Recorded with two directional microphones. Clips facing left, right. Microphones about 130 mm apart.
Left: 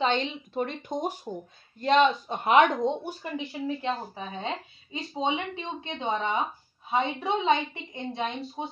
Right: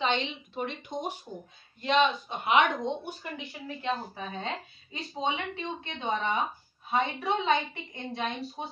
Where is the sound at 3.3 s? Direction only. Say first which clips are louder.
Left 8 dB; 25° left (ahead or behind).